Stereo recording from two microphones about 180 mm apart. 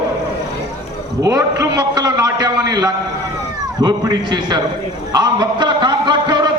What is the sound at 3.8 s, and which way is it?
Speech, 25° right (ahead or behind).